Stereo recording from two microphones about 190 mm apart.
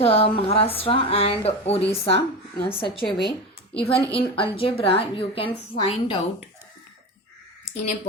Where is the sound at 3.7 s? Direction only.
30° left (ahead or behind).